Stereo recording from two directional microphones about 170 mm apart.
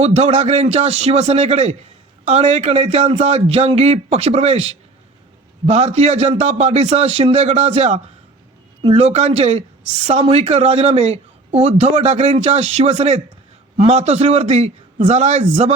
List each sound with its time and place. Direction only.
0.0 s a man's voice: 40° right (ahead or behind)